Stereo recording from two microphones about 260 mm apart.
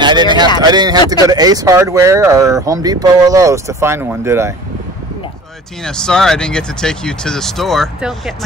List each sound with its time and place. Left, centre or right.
0.0 s speech: centre
5.9 s speech: centre